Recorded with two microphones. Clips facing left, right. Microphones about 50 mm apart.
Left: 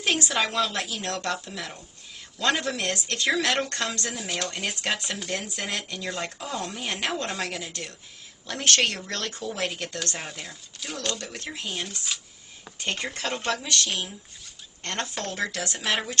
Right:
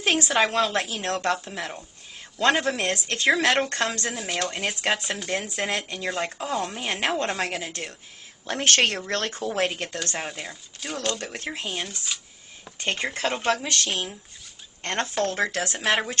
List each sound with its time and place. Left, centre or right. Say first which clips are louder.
0.0 s a woman's voice: right 3 dB; right
4.1 s speech: right 3 dB; centre
4.8 s a woman's voice: right 5 dB; right
9.8 s speech: right 2 dB; right
11.2 s a woman's voice: right 3 dB; right
11.7 s speech: right 1 dB; centre
12.8 s a woman's voice: right 4 dB; right